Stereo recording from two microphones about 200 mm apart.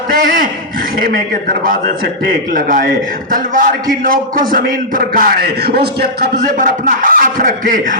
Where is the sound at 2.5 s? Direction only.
45° right (ahead or behind).